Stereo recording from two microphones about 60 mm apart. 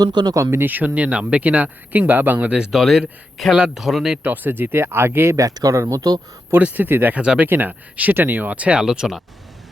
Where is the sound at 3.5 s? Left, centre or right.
Centre.